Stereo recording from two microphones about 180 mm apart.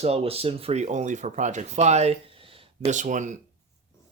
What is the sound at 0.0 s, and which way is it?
Speech, 35° right (ahead or behind).